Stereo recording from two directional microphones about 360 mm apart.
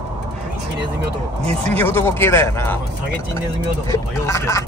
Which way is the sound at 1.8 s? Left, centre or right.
Centre.